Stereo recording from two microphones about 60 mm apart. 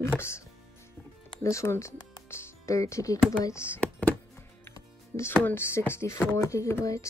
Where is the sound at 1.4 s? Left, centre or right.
Left.